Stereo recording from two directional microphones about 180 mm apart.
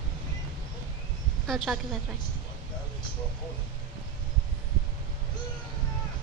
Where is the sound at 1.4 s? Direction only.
Centre (ahead or behind).